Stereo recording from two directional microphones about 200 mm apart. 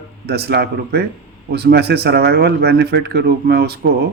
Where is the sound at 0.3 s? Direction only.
55° right (ahead or behind).